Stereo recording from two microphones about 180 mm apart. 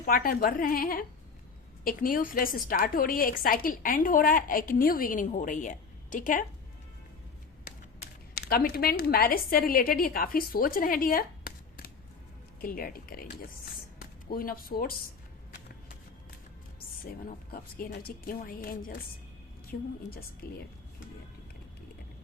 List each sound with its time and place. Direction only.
0.0 s a woman's voice: 55° left (ahead or behind)
7.7 s a sound: 60° left (ahead or behind)
8.4 s a woman's voice: 60° left (ahead or behind)
17.1 s a woman's voice: 55° left (ahead or behind)